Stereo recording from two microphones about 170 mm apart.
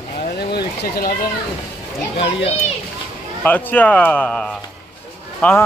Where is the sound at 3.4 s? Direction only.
10° left (ahead or behind).